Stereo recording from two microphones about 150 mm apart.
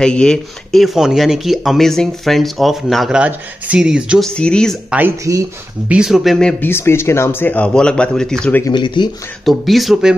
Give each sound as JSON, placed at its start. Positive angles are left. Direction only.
{"t": 0.0, "sound": "speech", "side_deg": 5}
{"t": 4.4, "sound": "speech", "side_deg": 5}
{"t": 4.9, "sound": "speech", "side_deg": -15}
{"t": 5.9, "sound": "speech", "side_deg": -5}
{"t": 6.6, "sound": "speech", "side_deg": 15}
{"t": 8.6, "sound": "speech", "side_deg": 30}
{"t": 9.4, "sound": "speech", "side_deg": 0}